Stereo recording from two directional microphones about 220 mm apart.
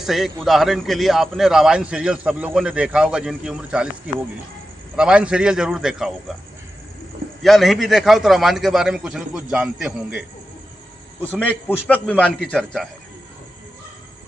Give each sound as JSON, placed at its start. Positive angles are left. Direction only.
{"t": 0.0, "sound": "a man's voice", "side_deg": 0}
{"t": 7.4, "sound": "a man's voice", "side_deg": 0}
{"t": 12.0, "sound": "a man's voice", "side_deg": 5}